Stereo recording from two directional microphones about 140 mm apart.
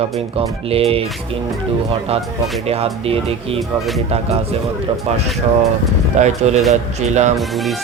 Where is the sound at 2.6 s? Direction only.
45° right (ahead or behind).